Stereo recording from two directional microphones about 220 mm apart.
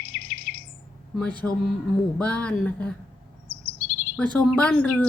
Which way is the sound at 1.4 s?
Centre (ahead or behind).